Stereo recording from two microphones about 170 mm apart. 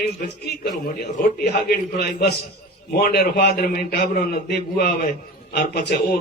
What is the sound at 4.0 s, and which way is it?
A man's voice, 60° left (ahead or behind).